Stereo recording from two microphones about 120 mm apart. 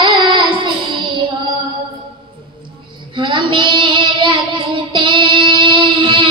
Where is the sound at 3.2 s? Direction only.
40° right (ahead or behind).